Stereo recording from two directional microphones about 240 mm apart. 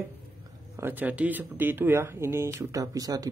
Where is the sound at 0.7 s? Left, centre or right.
Centre.